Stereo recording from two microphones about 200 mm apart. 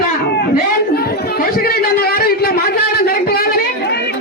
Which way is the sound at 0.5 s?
50° left (ahead or behind).